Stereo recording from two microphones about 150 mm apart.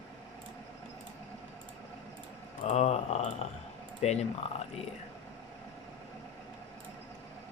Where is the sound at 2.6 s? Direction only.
50° left (ahead or behind).